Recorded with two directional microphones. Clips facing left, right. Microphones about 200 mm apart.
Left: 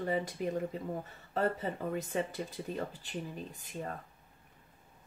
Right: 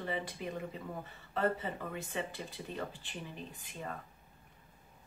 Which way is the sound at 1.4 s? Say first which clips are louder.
Left 1 dB; 40° left (ahead or behind).